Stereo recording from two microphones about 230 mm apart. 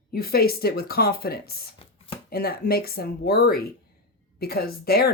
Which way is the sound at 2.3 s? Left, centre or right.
Left.